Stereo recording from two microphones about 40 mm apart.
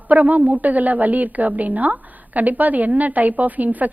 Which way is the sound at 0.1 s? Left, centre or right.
Right.